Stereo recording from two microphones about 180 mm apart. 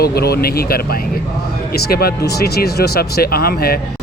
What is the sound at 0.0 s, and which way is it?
Speech, 60° left (ahead or behind).